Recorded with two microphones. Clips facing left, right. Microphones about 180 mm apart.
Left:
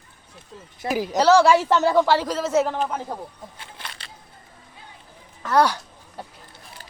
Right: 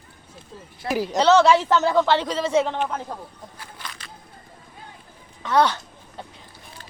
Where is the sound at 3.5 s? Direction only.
30° left (ahead or behind).